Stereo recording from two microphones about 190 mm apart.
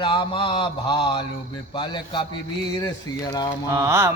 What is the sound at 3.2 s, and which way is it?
Speech, 20° left (ahead or behind).